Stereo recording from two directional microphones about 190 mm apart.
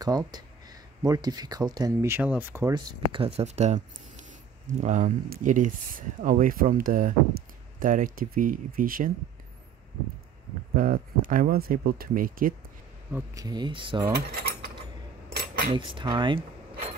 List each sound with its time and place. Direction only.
0.0 s speech: 20° right (ahead or behind)
2.7 s speech: 25° right (ahead or behind)
4.8 s speech: 40° right (ahead or behind)
10.8 s speech: 45° right (ahead or behind)
13.1 s speech: 20° right (ahead or behind)
14.1 s mechanisms: 50° right (ahead or behind)
15.7 s speech: 25° right (ahead or behind)